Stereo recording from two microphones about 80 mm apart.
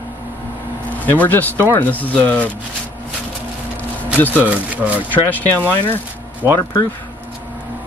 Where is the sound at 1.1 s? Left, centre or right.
Left.